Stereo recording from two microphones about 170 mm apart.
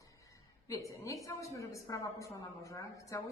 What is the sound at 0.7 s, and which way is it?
A woman's voice, 20° left (ahead or behind).